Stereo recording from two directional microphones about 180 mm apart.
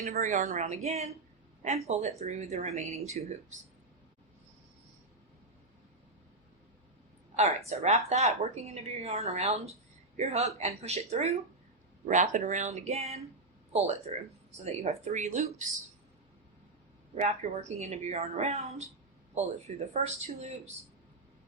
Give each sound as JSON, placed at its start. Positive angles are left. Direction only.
{"t": 0.0, "sound": "a woman's voice", "side_deg": -40}
{"t": 7.3, "sound": "a woman's voice", "side_deg": -35}
{"t": 17.2, "sound": "a woman's voice", "side_deg": -40}